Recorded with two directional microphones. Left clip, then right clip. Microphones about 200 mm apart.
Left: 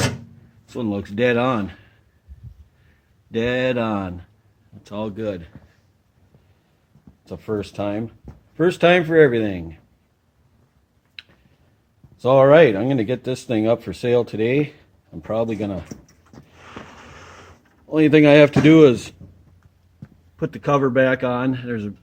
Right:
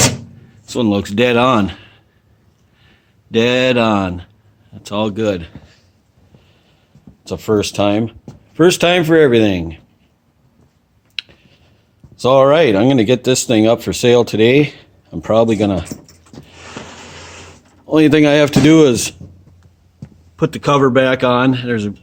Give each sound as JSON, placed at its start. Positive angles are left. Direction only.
{"t": 0.7, "sound": "speech", "side_deg": -10}
{"t": 3.3, "sound": "speech", "side_deg": -10}
{"t": 7.3, "sound": "speech", "side_deg": -15}
{"t": 12.2, "sound": "speech", "side_deg": -20}
{"t": 17.8, "sound": "speech", "side_deg": -25}
{"t": 20.3, "sound": "speech", "side_deg": -15}